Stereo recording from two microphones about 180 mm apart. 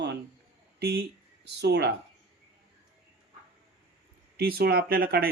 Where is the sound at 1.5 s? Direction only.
70° right (ahead or behind).